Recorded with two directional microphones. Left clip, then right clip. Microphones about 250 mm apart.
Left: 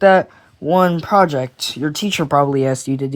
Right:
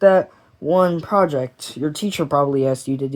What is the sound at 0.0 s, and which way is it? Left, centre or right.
Speech, left.